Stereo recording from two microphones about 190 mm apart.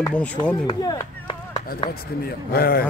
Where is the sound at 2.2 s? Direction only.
55° left (ahead or behind).